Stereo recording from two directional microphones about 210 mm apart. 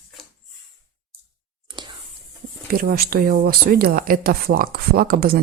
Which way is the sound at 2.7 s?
45° right (ahead or behind).